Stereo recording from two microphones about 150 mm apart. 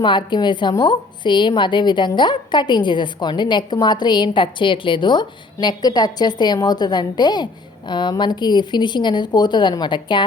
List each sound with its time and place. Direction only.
0.0 s a woman's voice: 30° left (ahead or behind)